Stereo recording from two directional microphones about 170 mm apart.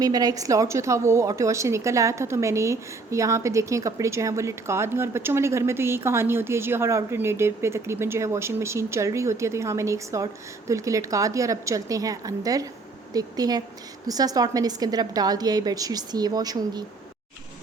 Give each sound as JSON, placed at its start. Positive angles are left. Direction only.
{"t": 0.0, "sound": "a woman's voice", "side_deg": -20}